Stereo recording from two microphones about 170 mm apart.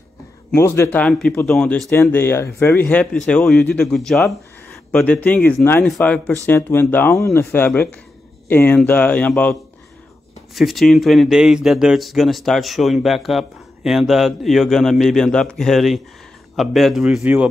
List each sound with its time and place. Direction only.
0.6 s speech: 15° left (ahead or behind); by 17.5 s 5° right (ahead or behind)